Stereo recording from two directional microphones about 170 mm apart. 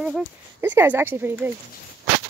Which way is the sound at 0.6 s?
15° right (ahead or behind).